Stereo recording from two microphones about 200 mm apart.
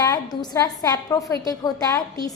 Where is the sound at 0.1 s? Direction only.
20° left (ahead or behind).